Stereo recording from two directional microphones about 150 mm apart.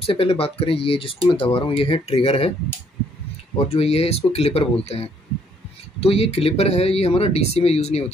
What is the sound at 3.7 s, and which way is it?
Speech, 40° left (ahead or behind).